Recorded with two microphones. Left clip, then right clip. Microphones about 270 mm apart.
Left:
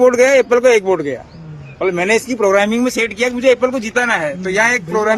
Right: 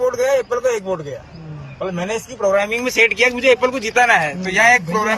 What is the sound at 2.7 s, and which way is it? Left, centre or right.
A man's voice, left.